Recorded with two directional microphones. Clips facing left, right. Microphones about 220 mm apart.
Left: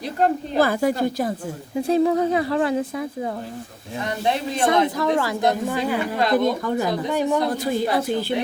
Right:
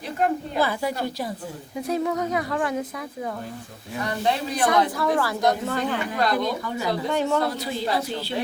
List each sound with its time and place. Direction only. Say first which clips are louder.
0.2 s a woman's voice: left 4 dB; 40° left (ahead or behind)
1.9 s a woman's voice: left 6 dB; 30° left (ahead or behind); by 6.0 s 10° left (ahead or behind)
6.4 s a woman's voice: left 5 dB; 50° left (ahead or behind)
7.1 s speech: left 1 dB; 10° left (ahead or behind)
7.5 s a woman's voice: left 5 dB; 50° left (ahead or behind)